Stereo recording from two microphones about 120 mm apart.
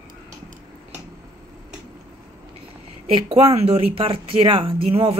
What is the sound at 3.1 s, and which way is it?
Speech, 50° right (ahead or behind).